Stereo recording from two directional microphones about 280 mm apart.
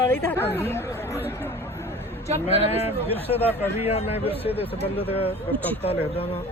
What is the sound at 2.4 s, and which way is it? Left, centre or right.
Speech, left.